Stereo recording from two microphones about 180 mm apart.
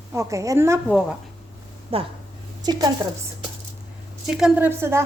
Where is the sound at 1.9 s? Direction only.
30° right (ahead or behind).